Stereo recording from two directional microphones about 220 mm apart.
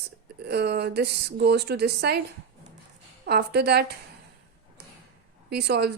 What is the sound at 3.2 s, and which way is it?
Speech, 50° right (ahead or behind).